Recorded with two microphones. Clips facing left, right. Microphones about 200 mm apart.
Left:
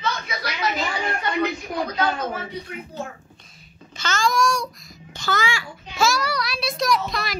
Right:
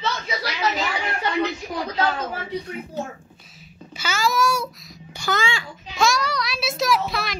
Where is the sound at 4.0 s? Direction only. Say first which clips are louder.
Even; 5° right (ahead or behind).